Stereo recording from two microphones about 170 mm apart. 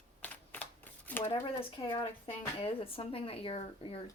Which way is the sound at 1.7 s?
30° left (ahead or behind).